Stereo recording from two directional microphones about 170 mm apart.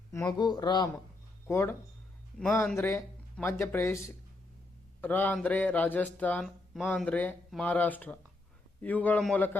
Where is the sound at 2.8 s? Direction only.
15° left (ahead or behind).